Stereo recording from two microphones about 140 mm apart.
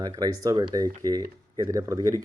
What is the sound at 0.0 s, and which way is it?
Speech, 25° right (ahead or behind).